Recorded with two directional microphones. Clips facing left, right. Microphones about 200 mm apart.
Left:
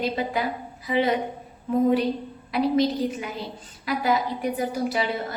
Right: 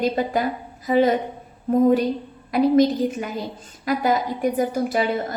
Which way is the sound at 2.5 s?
45° right (ahead or behind).